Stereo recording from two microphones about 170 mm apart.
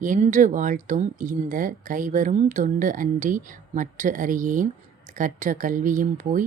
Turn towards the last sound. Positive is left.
turn(degrees=-50)  # may be behind; listen again after turning